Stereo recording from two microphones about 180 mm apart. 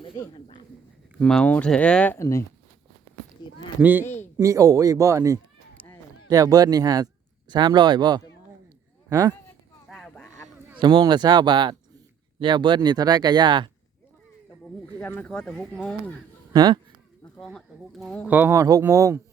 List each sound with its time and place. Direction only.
1.2 s speech: 5° left (ahead or behind)
3.4 s a sound: 25° left (ahead or behind)
3.8 s a man's voice: 10° right (ahead or behind)
9.9 s a sound: 5° left (ahead or behind)
10.8 s speech: 25° right (ahead or behind)
14.9 s speech: 10° left (ahead or behind)
16.5 s speech: 25° right (ahead or behind)
17.3 s speech: 5° left (ahead or behind)
18.3 s speech: 10° right (ahead or behind)